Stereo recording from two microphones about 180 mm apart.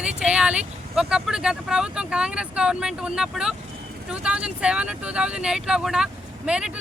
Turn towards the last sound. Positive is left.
turn(degrees=-5)  # may be behind; listen again after turning